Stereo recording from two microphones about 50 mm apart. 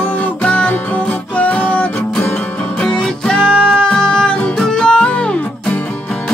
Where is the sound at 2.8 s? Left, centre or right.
Centre.